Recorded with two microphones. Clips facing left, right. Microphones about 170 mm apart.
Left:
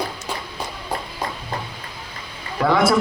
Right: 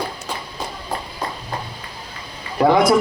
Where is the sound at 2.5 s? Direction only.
25° right (ahead or behind).